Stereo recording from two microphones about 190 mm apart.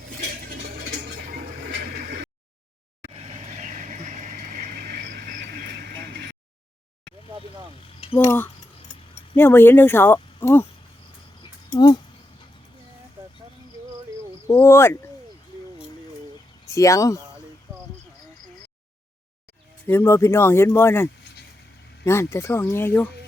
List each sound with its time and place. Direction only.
0.2 s a sound: 50° right (ahead or behind)
3.1 s vehicle: 30° right (ahead or behind); by 6.3 s 60° right (ahead or behind)
8.2 s speech: 10° left (ahead or behind)
11.7 s speech: 20° left (ahead or behind)
14.4 s speech: 15° left (ahead or behind)
16.6 s speech: 15° left (ahead or behind)
19.9 s speech: 15° left (ahead or behind)